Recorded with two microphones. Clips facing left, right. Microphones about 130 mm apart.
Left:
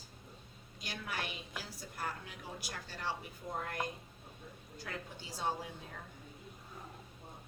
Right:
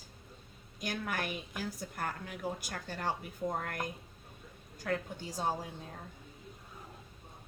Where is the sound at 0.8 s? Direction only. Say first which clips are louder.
Right 6 dB; 50° right (ahead or behind).